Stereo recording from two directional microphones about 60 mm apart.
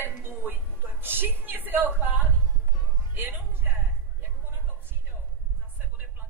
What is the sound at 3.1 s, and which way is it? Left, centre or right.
Speech, right.